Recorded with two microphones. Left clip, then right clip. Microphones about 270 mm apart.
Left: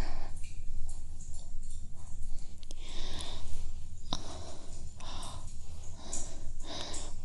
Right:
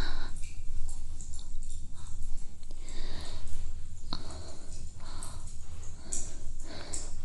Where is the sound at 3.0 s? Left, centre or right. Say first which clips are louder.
Left 3 dB; centre.